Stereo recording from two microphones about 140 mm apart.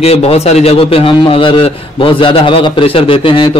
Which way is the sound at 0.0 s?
45° left (ahead or behind).